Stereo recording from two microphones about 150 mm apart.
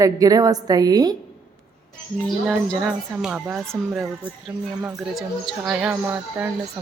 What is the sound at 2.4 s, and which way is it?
A woman's voice, 5° right (ahead or behind).